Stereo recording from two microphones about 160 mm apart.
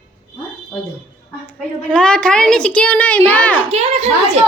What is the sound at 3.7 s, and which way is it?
Speech, 40° right (ahead or behind).